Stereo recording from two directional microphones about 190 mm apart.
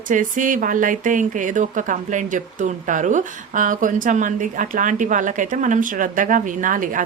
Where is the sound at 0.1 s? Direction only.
45° right (ahead or behind).